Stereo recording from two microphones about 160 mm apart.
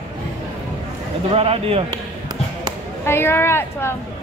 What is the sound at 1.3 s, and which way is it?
Speech, 35° right (ahead or behind).